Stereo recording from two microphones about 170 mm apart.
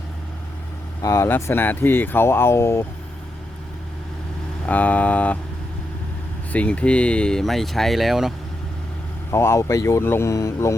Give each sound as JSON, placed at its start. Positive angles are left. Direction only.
{"t": 1.0, "sound": "speech", "side_deg": 15}
{"t": 4.6, "sound": "speech", "side_deg": 10}
{"t": 6.5, "sound": "speech", "side_deg": 10}
{"t": 9.3, "sound": "speech", "side_deg": 15}